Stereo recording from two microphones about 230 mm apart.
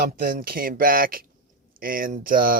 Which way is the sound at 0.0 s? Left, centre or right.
Right.